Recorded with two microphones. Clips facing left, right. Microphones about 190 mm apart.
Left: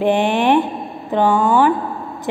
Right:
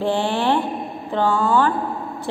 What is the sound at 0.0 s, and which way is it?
A woman's voice, 20° left (ahead or behind).